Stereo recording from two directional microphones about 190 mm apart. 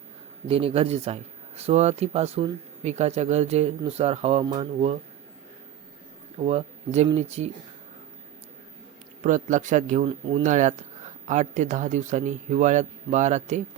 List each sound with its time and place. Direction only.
0.4 s speech: 30° right (ahead or behind)
6.4 s speech: 35° right (ahead or behind)
9.2 s speech: 40° right (ahead or behind)
10.1 s speech: 30° right (ahead or behind)
10.4 s speech: 40° right (ahead or behind)